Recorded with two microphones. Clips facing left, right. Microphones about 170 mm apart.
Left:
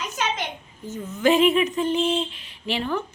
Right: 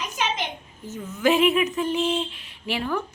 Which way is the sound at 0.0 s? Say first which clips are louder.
Even; 10° right (ahead or behind).